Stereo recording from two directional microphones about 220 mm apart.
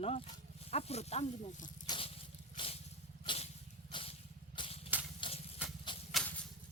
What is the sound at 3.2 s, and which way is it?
Vehicle, 30° left (ahead or behind).